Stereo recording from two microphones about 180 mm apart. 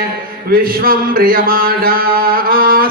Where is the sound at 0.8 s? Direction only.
55° right (ahead or behind).